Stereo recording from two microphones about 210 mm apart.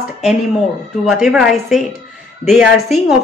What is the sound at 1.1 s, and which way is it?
Speech, centre (ahead or behind).